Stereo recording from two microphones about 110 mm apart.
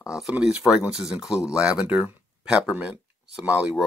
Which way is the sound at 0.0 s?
5° right (ahead or behind).